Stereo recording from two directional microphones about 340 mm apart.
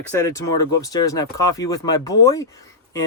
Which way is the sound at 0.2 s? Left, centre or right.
Centre.